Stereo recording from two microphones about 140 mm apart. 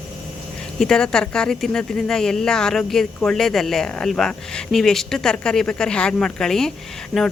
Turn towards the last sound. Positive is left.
turn(degrees=5)  # may be behind; listen again after turning